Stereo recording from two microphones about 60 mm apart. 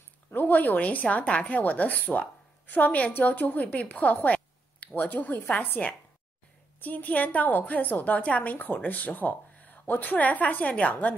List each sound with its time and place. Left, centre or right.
0.3 s a woman's voice: left
3.8 s a sound: left
5.1 s a woman's voice: left